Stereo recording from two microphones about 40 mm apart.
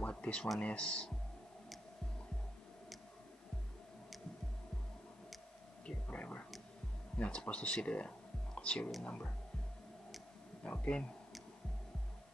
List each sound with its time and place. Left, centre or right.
0.0 s a sound: left
0.6 s speech: left
6.0 s whispering: left
7.2 s speech: left
10.6 s speech: left